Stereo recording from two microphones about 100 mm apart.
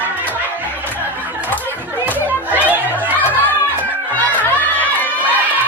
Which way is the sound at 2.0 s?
15° right (ahead or behind).